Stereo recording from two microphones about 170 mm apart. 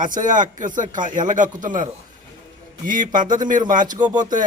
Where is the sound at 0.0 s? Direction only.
50° right (ahead or behind).